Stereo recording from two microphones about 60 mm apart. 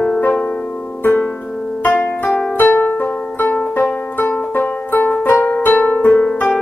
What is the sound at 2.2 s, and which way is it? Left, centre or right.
Music, centre.